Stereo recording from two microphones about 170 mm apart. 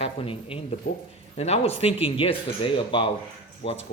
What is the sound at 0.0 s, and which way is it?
Speech, 30° left (ahead or behind).